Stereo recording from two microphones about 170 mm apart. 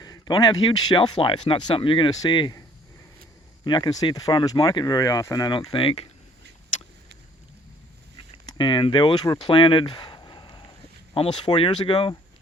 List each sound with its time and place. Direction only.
0.0 s speech: 25° left (ahead or behind)
8.5 s speech: 30° left (ahead or behind)